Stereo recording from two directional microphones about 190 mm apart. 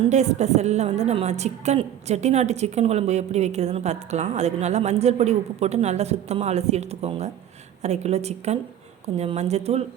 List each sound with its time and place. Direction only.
0.0 s a woman's voice: 35° right (ahead or behind)